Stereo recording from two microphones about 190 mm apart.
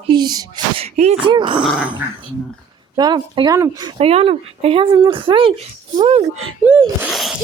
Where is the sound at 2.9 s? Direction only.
25° right (ahead or behind).